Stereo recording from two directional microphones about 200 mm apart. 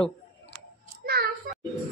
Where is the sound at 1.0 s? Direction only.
50° right (ahead or behind).